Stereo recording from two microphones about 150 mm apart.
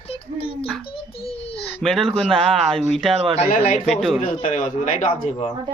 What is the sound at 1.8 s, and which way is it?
Speech, 5° left (ahead or behind).